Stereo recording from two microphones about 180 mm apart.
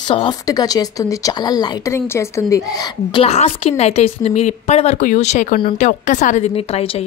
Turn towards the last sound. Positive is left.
turn(degrees=35)  # may be behind; listen again after turning